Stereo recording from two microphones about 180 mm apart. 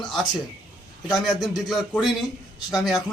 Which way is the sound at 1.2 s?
Centre (ahead or behind).